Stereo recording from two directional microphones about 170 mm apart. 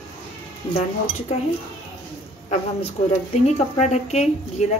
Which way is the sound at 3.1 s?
40° left (ahead or behind).